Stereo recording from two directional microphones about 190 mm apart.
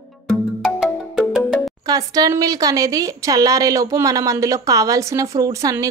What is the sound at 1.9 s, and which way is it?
A woman's voice, 20° right (ahead or behind).